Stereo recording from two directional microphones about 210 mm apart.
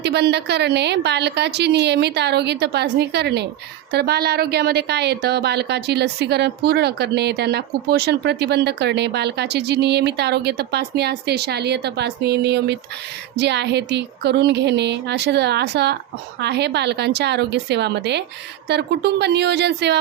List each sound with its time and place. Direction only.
0.0 s a woman's voice: 50° right (ahead or behind)